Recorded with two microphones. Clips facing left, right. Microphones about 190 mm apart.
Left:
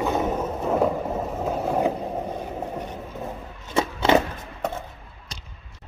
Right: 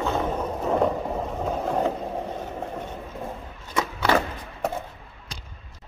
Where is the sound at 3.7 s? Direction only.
25° left (ahead or behind).